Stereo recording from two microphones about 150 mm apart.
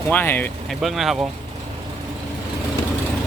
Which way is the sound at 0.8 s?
Centre (ahead or behind).